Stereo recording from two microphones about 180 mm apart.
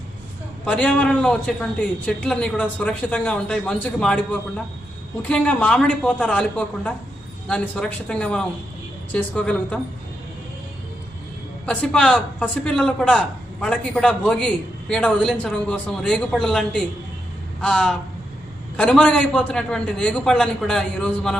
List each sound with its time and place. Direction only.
0.6 s a man's voice: 5° left (ahead or behind)
7.4 s a man's voice: 5° left (ahead or behind)
11.6 s a man's voice: 5° left (ahead or behind)